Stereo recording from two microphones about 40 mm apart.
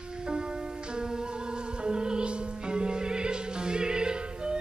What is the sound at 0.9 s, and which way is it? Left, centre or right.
Music, centre.